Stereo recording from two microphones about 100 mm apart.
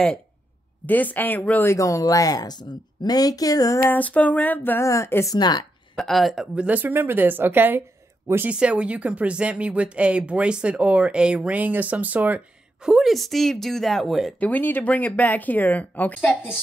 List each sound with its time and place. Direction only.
0.8 s speech: 15° left (ahead or behind)
1.7 s speech: 30° left (ahead or behind)
3.9 s speech: 15° left (ahead or behind)
4.8 s speech: 30° left (ahead or behind)
5.3 s speech: 45° left (ahead or behind)
5.9 s a woman's voice: centre (ahead or behind)
14.4 s speech: 20° left (ahead or behind)